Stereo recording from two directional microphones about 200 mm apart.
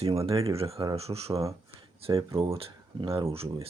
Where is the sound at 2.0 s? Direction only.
25° right (ahead or behind).